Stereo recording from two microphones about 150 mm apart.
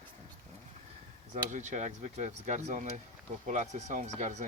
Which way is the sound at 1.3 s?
55° right (ahead or behind).